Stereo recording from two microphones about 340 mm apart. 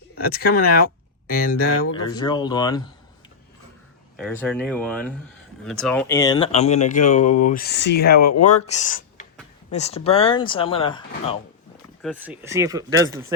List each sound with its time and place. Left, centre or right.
0.4 s speech: left
2.0 s speech: centre
4.2 s speech: centre; by 8.2 s left
8.2 s speech: left
8.6 s speech: left
12.0 s speech: centre